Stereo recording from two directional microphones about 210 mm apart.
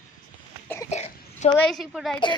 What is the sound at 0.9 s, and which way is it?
Cough, 30° left (ahead or behind).